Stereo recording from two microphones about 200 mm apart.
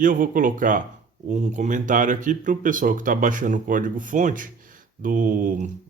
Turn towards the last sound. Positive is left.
turn(degrees=-40)  # may be behind; listen again after turning